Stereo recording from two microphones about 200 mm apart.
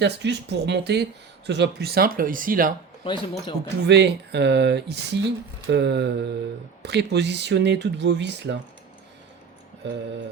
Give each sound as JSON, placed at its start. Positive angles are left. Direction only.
{"t": 0.0, "sound": "speech", "side_deg": -60}
{"t": 3.0, "sound": "speech", "side_deg": 25}
{"t": 3.8, "sound": "speech", "side_deg": -60}